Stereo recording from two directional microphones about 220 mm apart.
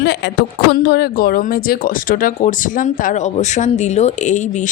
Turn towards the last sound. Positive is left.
turn(degrees=35)  # may be behind; listen again after turning